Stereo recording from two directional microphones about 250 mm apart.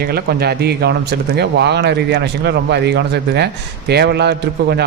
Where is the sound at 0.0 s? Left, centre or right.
Right.